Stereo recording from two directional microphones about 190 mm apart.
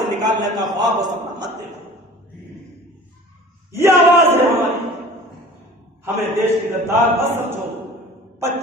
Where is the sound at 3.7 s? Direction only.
15° right (ahead or behind).